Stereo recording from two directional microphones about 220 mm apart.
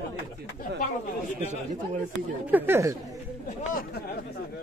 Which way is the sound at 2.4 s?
10° right (ahead or behind).